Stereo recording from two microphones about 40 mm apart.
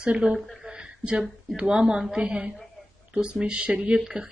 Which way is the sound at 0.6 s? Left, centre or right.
Right.